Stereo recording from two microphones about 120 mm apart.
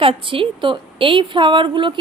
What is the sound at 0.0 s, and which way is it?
A woman's voice, 45° right (ahead or behind).